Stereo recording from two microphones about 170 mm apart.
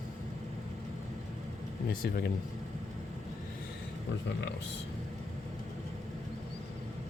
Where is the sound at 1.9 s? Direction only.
60° left (ahead or behind).